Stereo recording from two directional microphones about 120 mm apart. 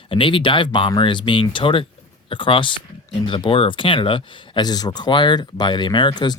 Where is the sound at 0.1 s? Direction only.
45° left (ahead or behind).